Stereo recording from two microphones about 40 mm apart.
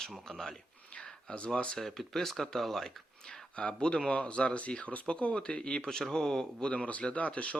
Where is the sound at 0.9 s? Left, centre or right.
Left.